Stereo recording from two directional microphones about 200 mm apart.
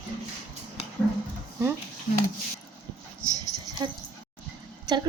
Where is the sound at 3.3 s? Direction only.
20° right (ahead or behind).